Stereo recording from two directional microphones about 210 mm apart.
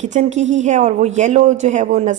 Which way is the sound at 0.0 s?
35° right (ahead or behind).